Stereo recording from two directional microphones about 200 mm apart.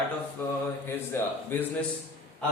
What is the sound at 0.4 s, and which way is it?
Mantra, 10° left (ahead or behind).